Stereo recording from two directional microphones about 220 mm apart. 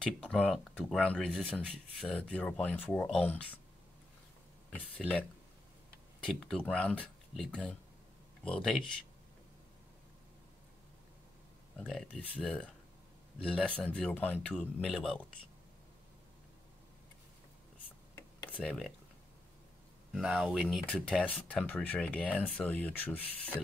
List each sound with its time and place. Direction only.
0.0 s speech: 5° left (ahead or behind)
4.7 s speech: 5° left (ahead or behind)
6.2 s speech: 5° left (ahead or behind)
11.7 s speech: 5° left (ahead or behind)
18.6 s speech: 5° left (ahead or behind)
20.1 s speech: centre (ahead or behind)